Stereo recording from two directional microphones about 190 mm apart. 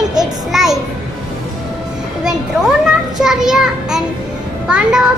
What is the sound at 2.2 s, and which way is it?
Children playing, 5° right (ahead or behind).